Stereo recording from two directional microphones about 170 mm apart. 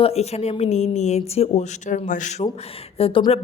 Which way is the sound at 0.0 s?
40° left (ahead or behind).